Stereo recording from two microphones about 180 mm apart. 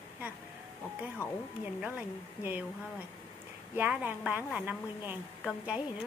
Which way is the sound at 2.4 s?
10° right (ahead or behind).